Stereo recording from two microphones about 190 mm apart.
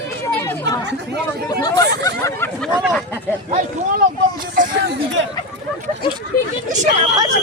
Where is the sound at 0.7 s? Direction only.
65° right (ahead or behind).